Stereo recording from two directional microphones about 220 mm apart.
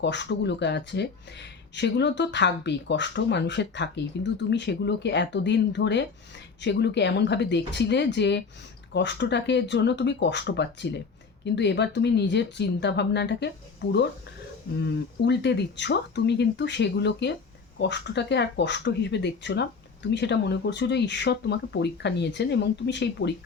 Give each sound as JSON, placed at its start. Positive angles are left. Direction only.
{"t": 0.0, "sound": "speech", "side_deg": 50}
{"t": 14.8, "sound": "speech", "side_deg": 50}